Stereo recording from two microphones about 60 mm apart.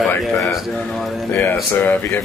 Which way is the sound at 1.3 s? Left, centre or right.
Left.